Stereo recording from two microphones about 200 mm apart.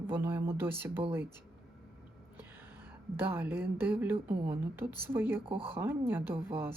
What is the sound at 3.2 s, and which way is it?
Speech, 10° right (ahead or behind).